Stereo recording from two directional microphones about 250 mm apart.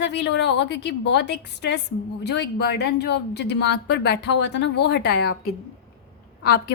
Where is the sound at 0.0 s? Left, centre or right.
Left.